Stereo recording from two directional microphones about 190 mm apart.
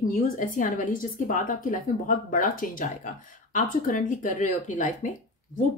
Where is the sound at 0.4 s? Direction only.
45° left (ahead or behind).